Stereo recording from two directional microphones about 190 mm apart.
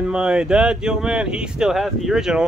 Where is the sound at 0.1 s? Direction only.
5° right (ahead or behind).